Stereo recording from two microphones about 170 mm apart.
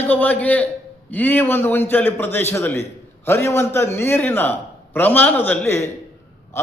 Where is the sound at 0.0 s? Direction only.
10° left (ahead or behind).